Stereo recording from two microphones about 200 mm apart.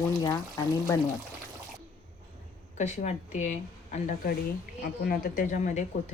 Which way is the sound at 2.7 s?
35° left (ahead or behind).